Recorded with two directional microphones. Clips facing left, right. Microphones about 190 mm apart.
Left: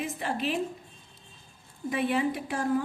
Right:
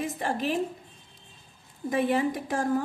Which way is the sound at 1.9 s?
45° right (ahead or behind).